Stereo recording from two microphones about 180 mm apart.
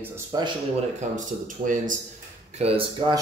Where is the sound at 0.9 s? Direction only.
45° right (ahead or behind).